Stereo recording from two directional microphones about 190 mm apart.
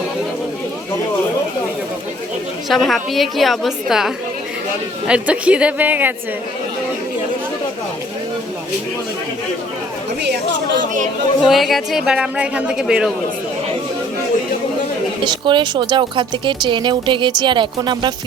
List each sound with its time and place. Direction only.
2.6 s a woman's voice: centre (ahead or behind)
11.4 s speech: centre (ahead or behind)
15.2 s speech: 25° right (ahead or behind)